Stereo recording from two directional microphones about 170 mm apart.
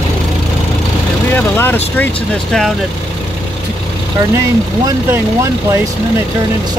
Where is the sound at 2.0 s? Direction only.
10° left (ahead or behind).